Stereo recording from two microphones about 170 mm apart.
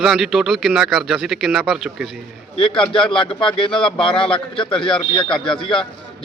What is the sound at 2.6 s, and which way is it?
Speech, 30° left (ahead or behind).